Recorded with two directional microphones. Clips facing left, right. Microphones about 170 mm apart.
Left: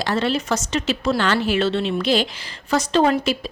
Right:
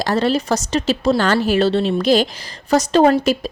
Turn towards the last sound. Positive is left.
turn(degrees=-45)  # may be behind; listen again after turning